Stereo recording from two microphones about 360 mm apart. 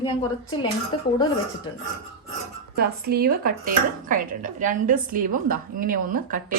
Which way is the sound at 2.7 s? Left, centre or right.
Right.